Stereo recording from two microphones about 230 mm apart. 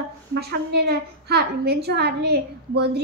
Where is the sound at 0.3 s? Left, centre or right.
Right.